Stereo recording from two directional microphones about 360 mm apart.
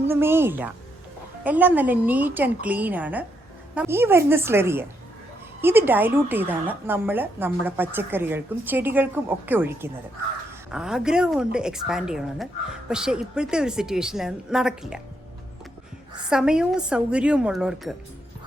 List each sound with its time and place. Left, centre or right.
0.1 s a woman's voice: centre
16.2 s a woman's voice: centre